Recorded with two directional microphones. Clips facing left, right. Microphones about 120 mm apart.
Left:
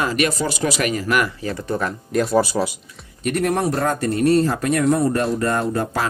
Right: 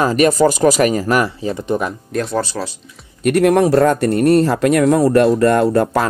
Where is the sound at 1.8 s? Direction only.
Centre (ahead or behind).